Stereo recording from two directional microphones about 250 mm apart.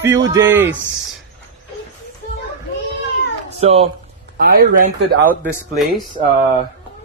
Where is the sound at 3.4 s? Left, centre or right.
Right.